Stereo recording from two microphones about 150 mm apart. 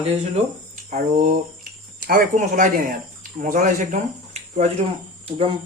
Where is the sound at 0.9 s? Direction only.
60° right (ahead or behind).